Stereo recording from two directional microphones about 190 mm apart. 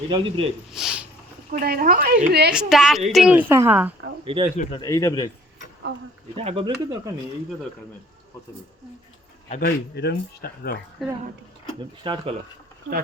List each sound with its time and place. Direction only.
0.1 s speech: 25° right (ahead or behind)
0.7 s a sound: centre (ahead or behind)
1.5 s speech: 50° right (ahead or behind)
2.5 s a woman's voice: 5° right (ahead or behind)
4.2 s speech: 30° right (ahead or behind)
4.8 s speech: 15° left (ahead or behind)
6.3 s speech: 30° right (ahead or behind)
9.6 s speech: 55° left (ahead or behind)
11.0 s a woman's voice: centre (ahead or behind)
12.0 s speech: 25° right (ahead or behind)